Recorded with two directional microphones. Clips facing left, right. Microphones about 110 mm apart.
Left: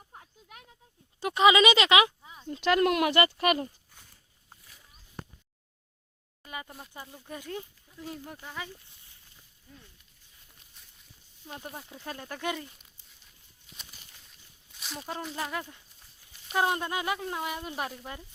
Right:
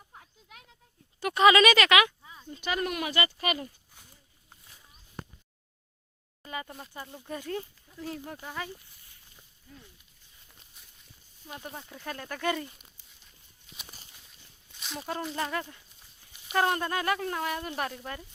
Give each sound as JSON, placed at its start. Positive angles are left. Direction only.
{"t": 0.1, "sound": "a sound", "side_deg": 45}
{"t": 1.3, "sound": "speech", "side_deg": 15}
{"t": 2.5, "sound": "speech", "side_deg": 80}
{"t": 6.4, "sound": "speech", "side_deg": 5}
{"t": 10.8, "sound": "walk", "side_deg": -5}
{"t": 11.4, "sound": "speech", "side_deg": 30}
{"t": 12.5, "sound": "a sound", "side_deg": 0}
{"t": 16.6, "sound": "speech", "side_deg": 15}